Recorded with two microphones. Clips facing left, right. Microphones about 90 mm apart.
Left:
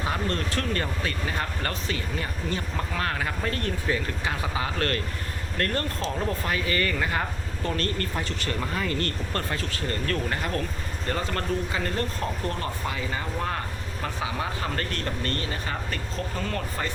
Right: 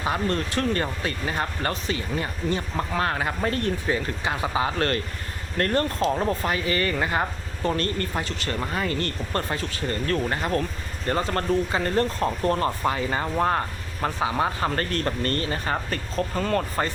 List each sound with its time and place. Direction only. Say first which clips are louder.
0.0 s speech: right 3 dB; 20° right (ahead or behind); by 16.9 s 40° right (ahead or behind)